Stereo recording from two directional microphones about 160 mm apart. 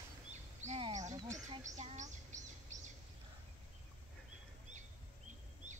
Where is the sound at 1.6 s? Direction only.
50° right (ahead or behind).